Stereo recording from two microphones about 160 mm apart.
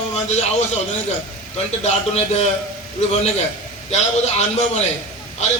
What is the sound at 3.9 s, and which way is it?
Speech, 45° left (ahead or behind).